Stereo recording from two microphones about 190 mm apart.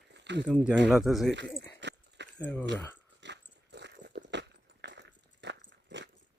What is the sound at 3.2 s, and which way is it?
Dog, 65° right (ahead or behind).